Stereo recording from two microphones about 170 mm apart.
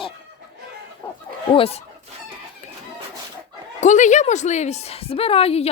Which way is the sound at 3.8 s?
45° left (ahead or behind).